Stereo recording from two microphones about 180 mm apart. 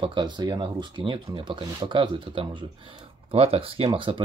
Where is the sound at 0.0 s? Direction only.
25° right (ahead or behind).